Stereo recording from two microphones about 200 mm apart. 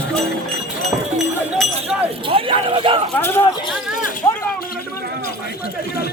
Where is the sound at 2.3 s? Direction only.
25° right (ahead or behind).